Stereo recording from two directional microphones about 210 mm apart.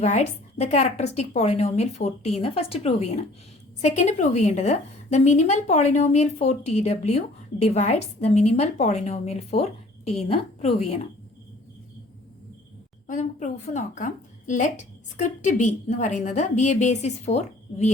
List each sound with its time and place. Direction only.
0.0 s a woman's voice: 30° left (ahead or behind)
13.1 s a woman's voice: 35° left (ahead or behind)